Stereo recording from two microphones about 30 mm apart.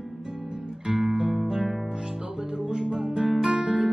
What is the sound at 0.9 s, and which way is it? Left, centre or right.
Music, centre.